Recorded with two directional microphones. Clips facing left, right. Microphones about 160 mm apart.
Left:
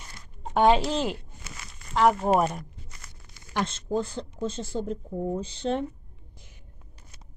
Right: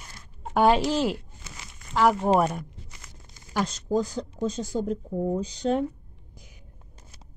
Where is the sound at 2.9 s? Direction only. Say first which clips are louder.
Right 1 dB; 15° right (ahead or behind).